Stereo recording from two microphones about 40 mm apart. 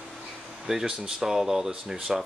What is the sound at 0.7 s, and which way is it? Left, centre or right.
Speech, centre.